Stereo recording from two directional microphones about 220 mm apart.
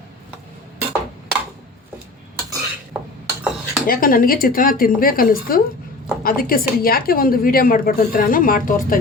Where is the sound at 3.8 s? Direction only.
40° left (ahead or behind).